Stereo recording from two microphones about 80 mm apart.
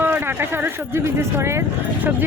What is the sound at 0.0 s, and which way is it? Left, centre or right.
Speech, right.